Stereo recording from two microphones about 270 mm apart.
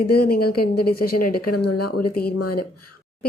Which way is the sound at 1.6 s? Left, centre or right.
Left.